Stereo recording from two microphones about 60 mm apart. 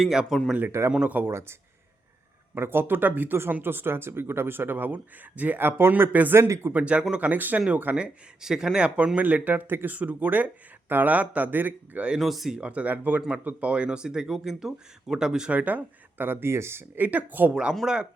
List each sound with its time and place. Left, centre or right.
0.0 s speech: centre
0.9 s speech: right
1.3 s speech: right
2.6 s speech: right
6.5 s speech: right
6.7 s speech: centre
7.2 s speech: right
7.9 s speech: centre; by 12.0 s right
12.2 s speech: centre
12.5 s speech: right
15.5 s speech: right
17.5 s speech: centre